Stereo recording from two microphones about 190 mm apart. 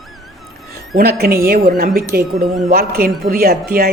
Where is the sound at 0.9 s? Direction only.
55° right (ahead or behind).